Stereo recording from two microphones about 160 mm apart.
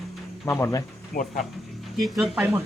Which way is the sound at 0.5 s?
15° left (ahead or behind).